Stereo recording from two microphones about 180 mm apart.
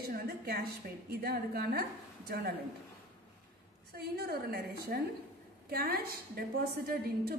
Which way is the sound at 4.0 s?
60° right (ahead or behind).